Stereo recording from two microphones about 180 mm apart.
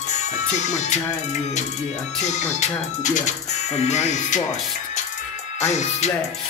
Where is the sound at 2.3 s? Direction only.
40° left (ahead or behind).